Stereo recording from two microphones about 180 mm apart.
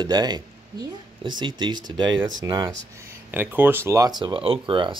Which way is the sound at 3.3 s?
10° right (ahead or behind).